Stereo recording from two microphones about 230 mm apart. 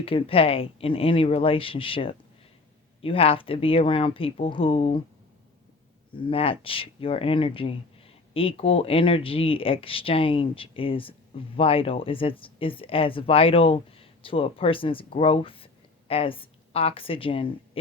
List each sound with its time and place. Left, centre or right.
0.0 s speech: left
6.1 s speech: left